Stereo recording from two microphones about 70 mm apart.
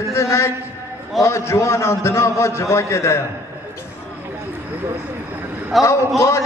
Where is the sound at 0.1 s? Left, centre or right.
Left.